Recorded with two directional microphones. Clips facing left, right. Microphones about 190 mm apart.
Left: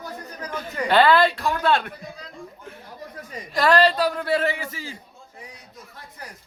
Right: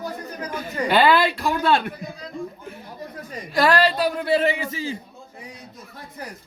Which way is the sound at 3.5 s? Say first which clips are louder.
Even; 5° right (ahead or behind).